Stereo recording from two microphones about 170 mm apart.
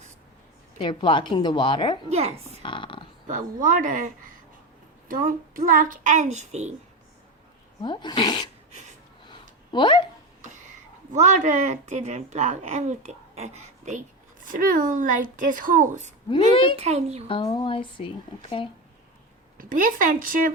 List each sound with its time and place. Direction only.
0.8 s a woman's voice: 30° left (ahead or behind)
2.0 s a child's voice: 40° right (ahead or behind)
2.6 s a sound: 30° left (ahead or behind)
3.2 s a woman's voice: 50° right (ahead or behind)
7.8 s speech: 25° left (ahead or behind)
9.7 s a woman's voice: 30° left (ahead or behind)
11.1 s a woman's voice: 45° right (ahead or behind)
14.4 s a woman's voice: 55° right (ahead or behind)
16.3 s a woman's voice: 30° left (ahead or behind)
16.7 s a child's voice: 40° right (ahead or behind)
17.2 s speech: 30° left (ahead or behind)
19.5 s a woman's voice: 50° right (ahead or behind)